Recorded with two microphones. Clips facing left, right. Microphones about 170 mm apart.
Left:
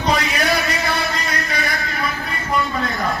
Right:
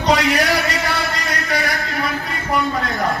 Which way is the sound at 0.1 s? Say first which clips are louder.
Right 4 dB; 75° right (ahead or behind).